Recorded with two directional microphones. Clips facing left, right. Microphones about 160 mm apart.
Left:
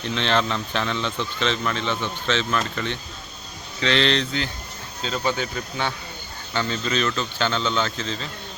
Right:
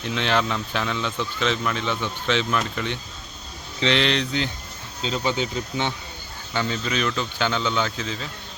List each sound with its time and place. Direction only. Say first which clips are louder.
0.0 s speech: even; 10° right (ahead or behind)